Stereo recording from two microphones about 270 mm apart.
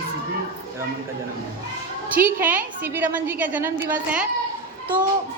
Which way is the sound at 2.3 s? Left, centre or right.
Centre.